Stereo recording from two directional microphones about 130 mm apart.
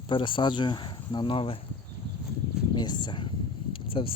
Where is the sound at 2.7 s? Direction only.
35° left (ahead or behind).